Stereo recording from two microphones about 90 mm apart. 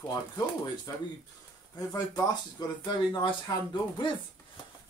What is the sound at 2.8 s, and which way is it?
Speech, 60° left (ahead or behind).